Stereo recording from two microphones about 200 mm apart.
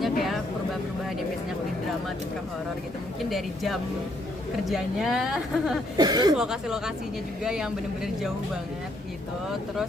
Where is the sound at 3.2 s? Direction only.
Centre (ahead or behind).